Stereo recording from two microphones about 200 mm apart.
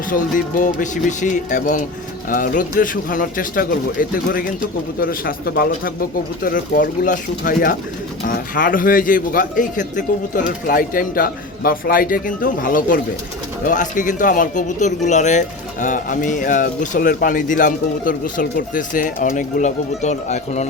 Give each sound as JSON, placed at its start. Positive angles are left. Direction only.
{"t": 0.1, "sound": "a man's voice", "side_deg": 40}